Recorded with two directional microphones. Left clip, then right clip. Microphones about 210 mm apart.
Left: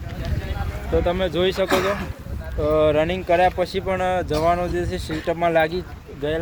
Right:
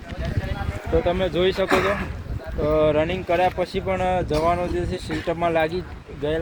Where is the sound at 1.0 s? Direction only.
40° left (ahead or behind).